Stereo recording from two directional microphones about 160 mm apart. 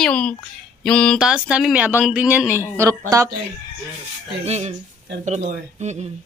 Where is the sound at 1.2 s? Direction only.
5° right (ahead or behind).